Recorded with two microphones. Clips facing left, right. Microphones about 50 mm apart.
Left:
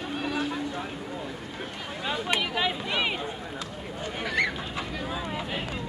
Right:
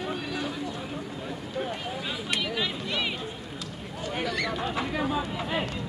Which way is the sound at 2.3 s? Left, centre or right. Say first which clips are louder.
Left 2 dB; left.